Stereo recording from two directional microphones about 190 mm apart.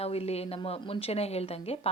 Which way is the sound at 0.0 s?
30° left (ahead or behind).